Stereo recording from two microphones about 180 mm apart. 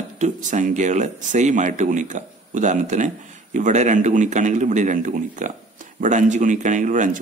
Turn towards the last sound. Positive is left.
turn(degrees=-45)  # may be behind; listen again after turning